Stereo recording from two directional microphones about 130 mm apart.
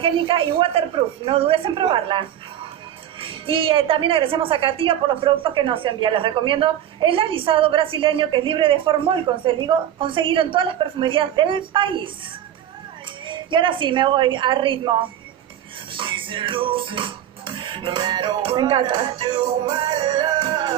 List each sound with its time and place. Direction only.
0.0 s a woman's voice: 45° right (ahead or behind)
13.3 s a woman's voice: 40° right (ahead or behind)
15.9 s music: 40° right (ahead or behind)